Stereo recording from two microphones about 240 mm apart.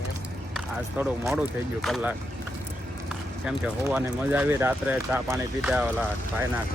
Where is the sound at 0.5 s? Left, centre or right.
Centre.